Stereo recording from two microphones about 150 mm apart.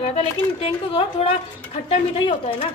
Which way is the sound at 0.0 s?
40° left (ahead or behind).